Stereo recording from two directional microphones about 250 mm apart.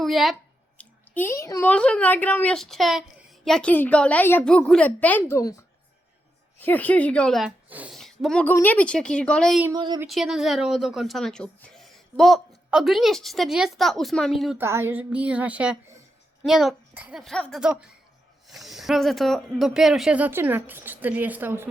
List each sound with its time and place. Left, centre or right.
0.0 s a woman's voice: centre
6.6 s speech: centre
9.6 s speech: centre
10.1 s speech: centre